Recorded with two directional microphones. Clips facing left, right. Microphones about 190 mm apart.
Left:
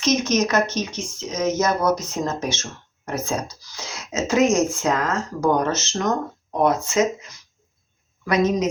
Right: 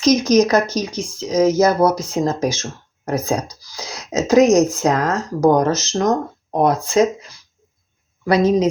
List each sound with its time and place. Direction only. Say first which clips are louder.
0.0 s speech: right 6 dB; 35° right (ahead or behind)